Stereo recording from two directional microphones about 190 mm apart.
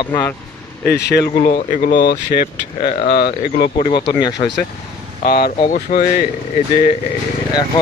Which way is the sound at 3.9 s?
25° left (ahead or behind).